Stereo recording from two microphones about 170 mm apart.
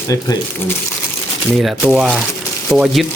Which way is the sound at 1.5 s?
Centre (ahead or behind).